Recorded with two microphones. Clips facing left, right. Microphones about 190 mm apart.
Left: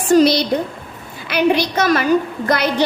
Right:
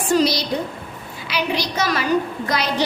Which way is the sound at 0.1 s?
55° left (ahead or behind).